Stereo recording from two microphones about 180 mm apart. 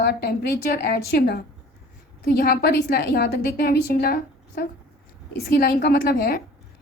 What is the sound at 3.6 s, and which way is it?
A woman's voice, 55° left (ahead or behind).